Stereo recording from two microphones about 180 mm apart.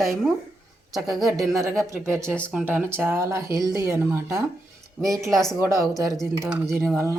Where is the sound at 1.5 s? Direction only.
15° right (ahead or behind).